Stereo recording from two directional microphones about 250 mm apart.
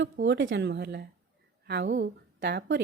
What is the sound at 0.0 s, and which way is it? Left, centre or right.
A woman's voice, right.